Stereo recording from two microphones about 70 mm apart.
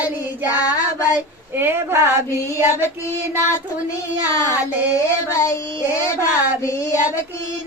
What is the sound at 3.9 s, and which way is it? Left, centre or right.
Child singing, left.